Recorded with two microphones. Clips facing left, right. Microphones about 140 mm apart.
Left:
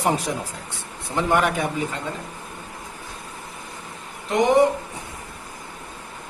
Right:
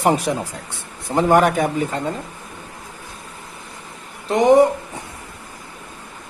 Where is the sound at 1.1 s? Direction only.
45° right (ahead or behind).